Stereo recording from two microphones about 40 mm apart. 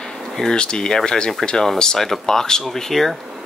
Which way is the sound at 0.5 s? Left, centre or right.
Centre.